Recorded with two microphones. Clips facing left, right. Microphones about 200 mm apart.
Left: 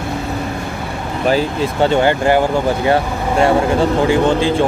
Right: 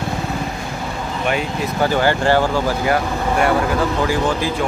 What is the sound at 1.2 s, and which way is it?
Speech, 30° left (ahead or behind).